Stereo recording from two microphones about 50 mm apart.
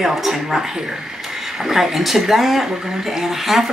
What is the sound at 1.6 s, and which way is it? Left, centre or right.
Speech, centre.